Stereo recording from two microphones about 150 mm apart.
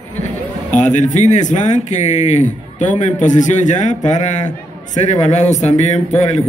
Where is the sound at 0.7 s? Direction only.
55° left (ahead or behind).